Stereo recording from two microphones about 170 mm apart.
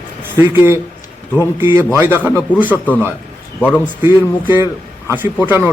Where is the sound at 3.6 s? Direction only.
10° left (ahead or behind).